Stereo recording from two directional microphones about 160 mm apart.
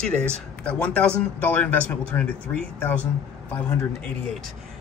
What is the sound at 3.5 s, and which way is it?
Speech, 10° left (ahead or behind).